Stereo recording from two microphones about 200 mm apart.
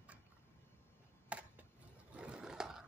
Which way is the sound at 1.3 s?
5° right (ahead or behind).